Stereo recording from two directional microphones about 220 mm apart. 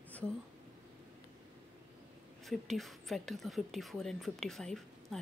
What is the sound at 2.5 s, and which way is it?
Speech, centre (ahead or behind).